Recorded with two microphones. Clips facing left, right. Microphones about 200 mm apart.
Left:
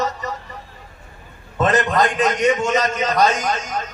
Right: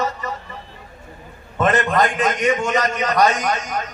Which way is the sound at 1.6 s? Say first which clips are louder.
Even; 20° left (ahead or behind).